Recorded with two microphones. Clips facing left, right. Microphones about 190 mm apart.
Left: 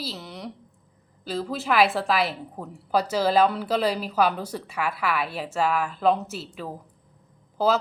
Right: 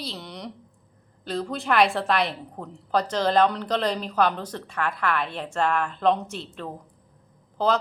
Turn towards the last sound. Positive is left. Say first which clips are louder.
# left 1 dB
turn(degrees=5)  # may be behind; listen again after turning